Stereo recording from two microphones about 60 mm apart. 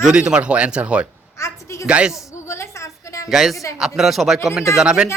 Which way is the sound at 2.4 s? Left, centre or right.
Left.